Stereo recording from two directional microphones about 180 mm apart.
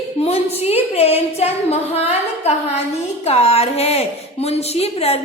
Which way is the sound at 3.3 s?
35° left (ahead or behind).